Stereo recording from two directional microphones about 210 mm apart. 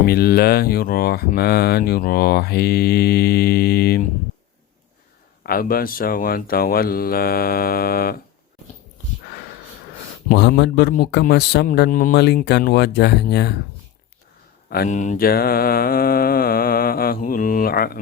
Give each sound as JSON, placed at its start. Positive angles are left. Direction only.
{"t": 0.0, "sound": "mantra", "side_deg": 50}
{"t": 5.4, "sound": "mantra", "side_deg": 45}
{"t": 10.2, "sound": "mantra", "side_deg": 55}
{"t": 14.7, "sound": "mantra", "side_deg": 40}